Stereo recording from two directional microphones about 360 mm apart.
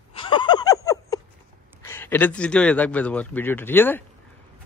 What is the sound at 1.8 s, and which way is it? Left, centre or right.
Speech, centre.